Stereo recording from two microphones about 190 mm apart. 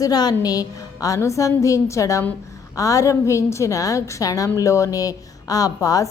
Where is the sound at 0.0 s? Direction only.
20° left (ahead or behind).